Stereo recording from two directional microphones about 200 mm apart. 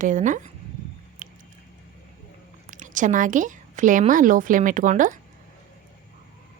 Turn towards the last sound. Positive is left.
turn(degrees=-40)  # may be behind; listen again after turning